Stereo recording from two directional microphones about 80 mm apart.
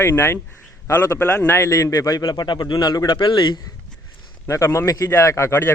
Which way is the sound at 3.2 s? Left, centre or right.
Left.